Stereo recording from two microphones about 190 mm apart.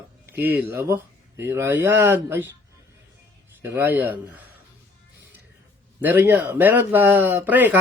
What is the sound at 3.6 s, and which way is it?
Speech, 10° right (ahead or behind).